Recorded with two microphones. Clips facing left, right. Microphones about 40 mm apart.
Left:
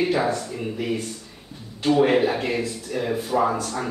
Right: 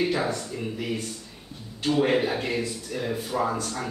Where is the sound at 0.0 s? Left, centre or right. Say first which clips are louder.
Left 4 dB; centre.